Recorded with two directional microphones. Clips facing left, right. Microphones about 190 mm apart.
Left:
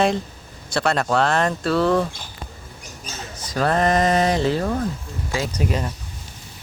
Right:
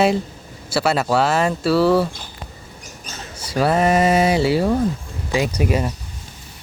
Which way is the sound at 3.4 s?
10° right (ahead or behind).